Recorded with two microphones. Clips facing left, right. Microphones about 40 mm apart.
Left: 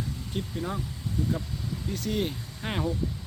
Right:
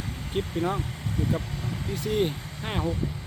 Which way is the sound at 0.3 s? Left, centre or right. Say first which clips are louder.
Right 6 dB; right.